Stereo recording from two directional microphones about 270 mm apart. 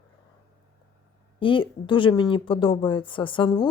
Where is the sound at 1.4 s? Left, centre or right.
Centre.